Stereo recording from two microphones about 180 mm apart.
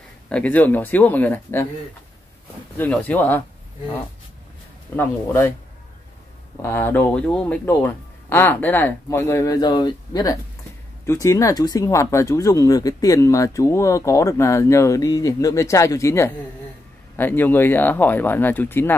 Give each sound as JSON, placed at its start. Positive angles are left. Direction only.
{"t": 0.3, "sound": "speech", "side_deg": 10}
{"t": 2.8, "sound": "speech", "side_deg": 10}
{"t": 4.9, "sound": "speech", "side_deg": 10}
{"t": 6.6, "sound": "speech", "side_deg": 10}